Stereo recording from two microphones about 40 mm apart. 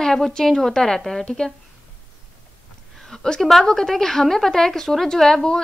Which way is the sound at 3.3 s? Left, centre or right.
Centre.